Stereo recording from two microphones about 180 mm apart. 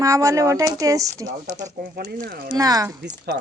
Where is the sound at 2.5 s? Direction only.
20° right (ahead or behind).